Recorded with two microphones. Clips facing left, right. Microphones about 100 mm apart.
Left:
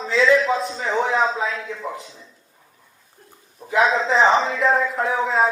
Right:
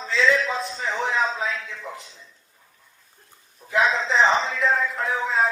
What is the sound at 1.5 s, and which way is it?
Speech, 35° left (ahead or behind).